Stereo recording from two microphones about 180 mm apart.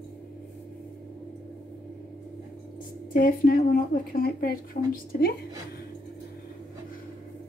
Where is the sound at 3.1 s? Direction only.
50° left (ahead or behind).